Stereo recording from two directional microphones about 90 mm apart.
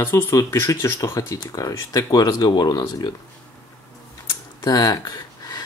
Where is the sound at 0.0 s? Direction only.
35° left (ahead or behind); by 3.1 s 50° left (ahead or behind).